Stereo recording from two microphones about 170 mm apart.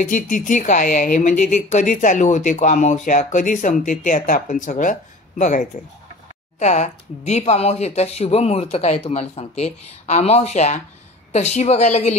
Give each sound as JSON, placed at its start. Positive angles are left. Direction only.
{"t": 0.0, "sound": "a woman's voice", "side_deg": 50}